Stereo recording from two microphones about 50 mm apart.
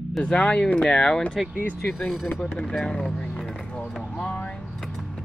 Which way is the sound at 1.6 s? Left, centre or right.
Left.